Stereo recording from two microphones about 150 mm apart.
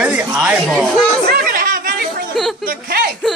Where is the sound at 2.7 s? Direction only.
85° right.